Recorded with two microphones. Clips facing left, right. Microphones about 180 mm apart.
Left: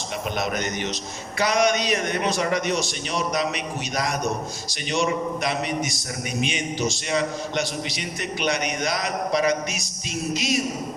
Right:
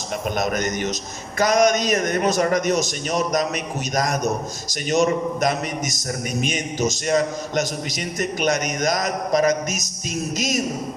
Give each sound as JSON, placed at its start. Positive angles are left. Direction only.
{"t": 0.3, "sound": "a man's voice", "side_deg": -45}